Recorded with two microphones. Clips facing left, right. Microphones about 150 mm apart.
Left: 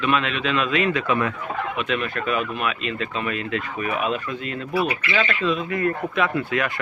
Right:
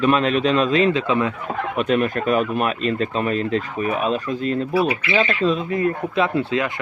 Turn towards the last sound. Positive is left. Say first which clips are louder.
# right 3 dB
turn(degrees=-25)  # may be behind; listen again after turning